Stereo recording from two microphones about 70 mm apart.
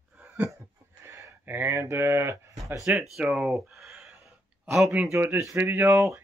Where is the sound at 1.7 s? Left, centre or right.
Right.